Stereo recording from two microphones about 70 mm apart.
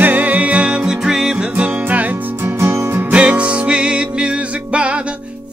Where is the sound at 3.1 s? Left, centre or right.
Centre.